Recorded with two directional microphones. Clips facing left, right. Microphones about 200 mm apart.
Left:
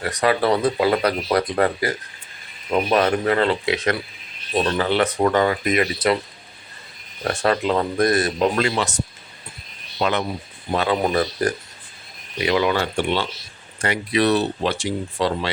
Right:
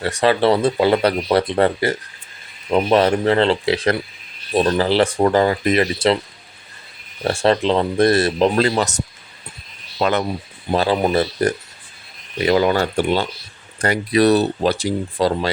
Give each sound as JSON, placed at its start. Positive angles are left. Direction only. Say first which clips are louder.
{"t": 0.0, "sound": "speech", "louder": "right 3 dB", "side_deg": -30}
{"t": 7.3, "sound": "speech", "louder": "right 4 dB", "side_deg": -30}
{"t": 10.0, "sound": "speech", "louder": "right 3 dB", "side_deg": -45}
{"t": 10.7, "sound": "speech", "louder": "right 3 dB", "side_deg": -30}
{"t": 12.4, "sound": "speech", "louder": "right 4 dB", "side_deg": -40}